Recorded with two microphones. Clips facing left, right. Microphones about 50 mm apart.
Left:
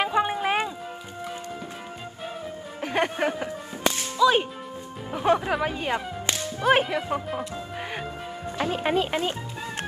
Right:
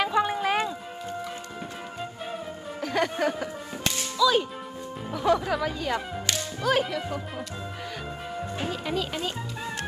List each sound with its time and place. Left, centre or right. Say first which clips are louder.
0.0 s music: left 1 dB; left
2.8 s music: left 1 dB; left
3.8 s whip: left 3 dB; left
5.1 s speech: left 1 dB; left